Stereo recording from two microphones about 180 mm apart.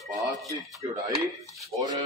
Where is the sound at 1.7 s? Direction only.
20° right (ahead or behind).